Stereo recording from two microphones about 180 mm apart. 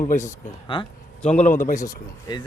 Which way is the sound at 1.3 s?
45° left (ahead or behind).